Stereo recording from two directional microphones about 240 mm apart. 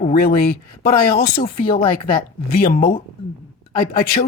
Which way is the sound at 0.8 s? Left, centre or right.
Left.